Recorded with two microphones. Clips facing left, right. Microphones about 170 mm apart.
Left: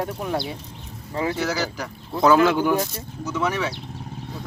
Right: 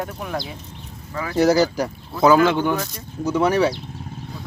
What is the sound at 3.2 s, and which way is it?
Speech, 35° right (ahead or behind).